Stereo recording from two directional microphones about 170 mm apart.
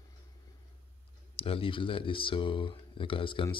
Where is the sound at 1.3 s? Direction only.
35° left (ahead or behind).